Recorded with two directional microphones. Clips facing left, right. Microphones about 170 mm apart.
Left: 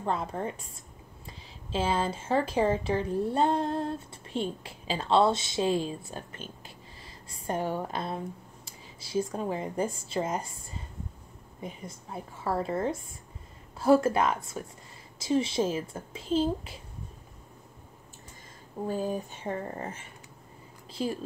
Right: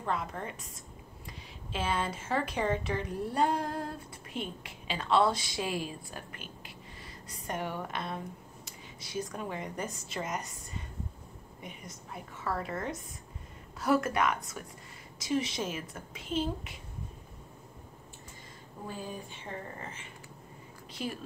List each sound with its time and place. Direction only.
0.0 s a woman's voice: 30° left (ahead or behind)
1.7 s a woman's voice: 30° left (ahead or behind)
18.9 s speech: 45° left (ahead or behind)
21.0 s a woman's voice: 35° left (ahead or behind)